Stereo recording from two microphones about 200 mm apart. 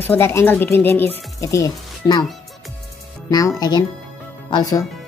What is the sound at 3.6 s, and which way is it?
A woman's voice, 20° left (ahead or behind).